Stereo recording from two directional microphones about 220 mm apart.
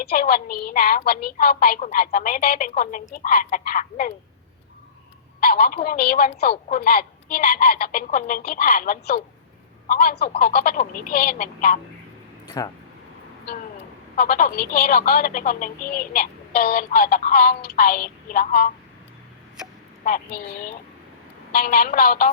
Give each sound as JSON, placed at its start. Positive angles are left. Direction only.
{"t": 0.0, "sound": "speech", "side_deg": 45}
{"t": 5.4, "sound": "a woman's voice", "side_deg": 45}
{"t": 12.5, "sound": "speech", "side_deg": 15}
{"t": 14.2, "sound": "speech", "side_deg": 40}
{"t": 19.6, "sound": "a sound", "side_deg": -5}
{"t": 20.1, "sound": "speech", "side_deg": 40}